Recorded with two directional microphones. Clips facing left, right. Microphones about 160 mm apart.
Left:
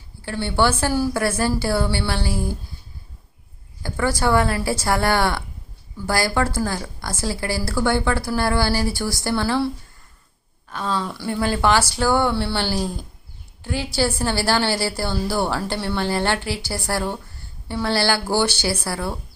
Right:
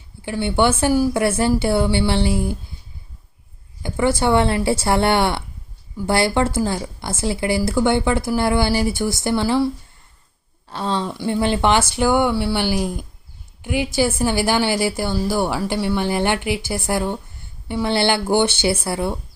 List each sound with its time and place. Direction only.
0.2 s speech: 15° right (ahead or behind)
3.8 s speech: 20° right (ahead or behind)
10.7 s a woman's voice: 30° right (ahead or behind)